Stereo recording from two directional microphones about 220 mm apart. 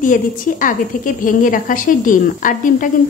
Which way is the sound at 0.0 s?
35° left (ahead or behind).